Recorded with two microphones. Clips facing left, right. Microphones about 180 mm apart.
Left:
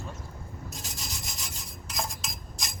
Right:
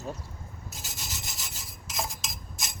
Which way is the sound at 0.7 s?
Centre (ahead or behind).